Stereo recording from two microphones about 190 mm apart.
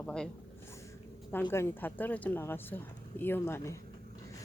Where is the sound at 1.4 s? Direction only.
15° left (ahead or behind).